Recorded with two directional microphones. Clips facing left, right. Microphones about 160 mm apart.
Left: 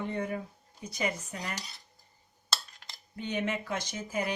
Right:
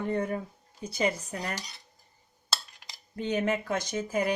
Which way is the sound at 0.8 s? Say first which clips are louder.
Right 5 dB; 30° right (ahead or behind).